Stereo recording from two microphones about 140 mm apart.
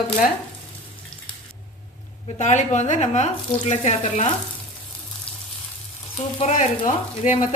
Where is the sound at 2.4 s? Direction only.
60° left (ahead or behind).